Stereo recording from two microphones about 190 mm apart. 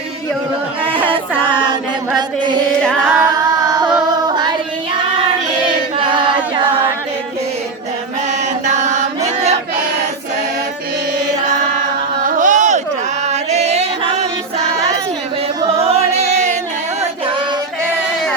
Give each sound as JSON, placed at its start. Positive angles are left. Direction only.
{"t": 2.8, "sound": "singing", "side_deg": -5}
{"t": 3.2, "sound": "a sound", "side_deg": -20}
{"t": 6.1, "sound": "choir", "side_deg": -25}
{"t": 8.3, "sound": "chant", "side_deg": -40}
{"t": 12.2, "sound": "carnatic music", "side_deg": -45}
{"t": 13.2, "sound": "music", "side_deg": -35}
{"t": 15.8, "sound": "music", "side_deg": -30}